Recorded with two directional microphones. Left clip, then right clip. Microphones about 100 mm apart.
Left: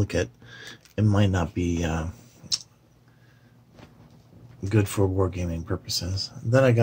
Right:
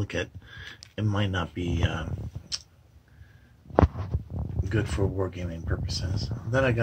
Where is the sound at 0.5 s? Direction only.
10° left (ahead or behind).